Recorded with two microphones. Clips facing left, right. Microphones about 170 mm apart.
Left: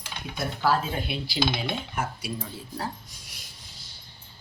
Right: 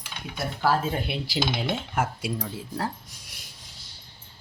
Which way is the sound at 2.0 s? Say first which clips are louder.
Right 4 dB; 85° right.